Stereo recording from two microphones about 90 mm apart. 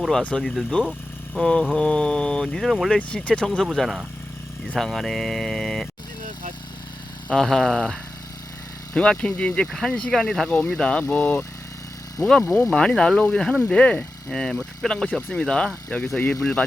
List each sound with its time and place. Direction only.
0.2 s speech: 10° left (ahead or behind)
3.1 s speech: 10° left (ahead or behind)
7.3 s speech: 5° left (ahead or behind)
9.0 s speech: 10° left (ahead or behind)
12.2 s speech: 40° left (ahead or behind)
12.7 s speech: 10° left (ahead or behind)